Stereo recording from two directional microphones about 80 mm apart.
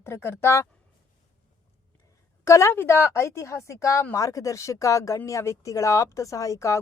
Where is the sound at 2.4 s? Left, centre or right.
Left.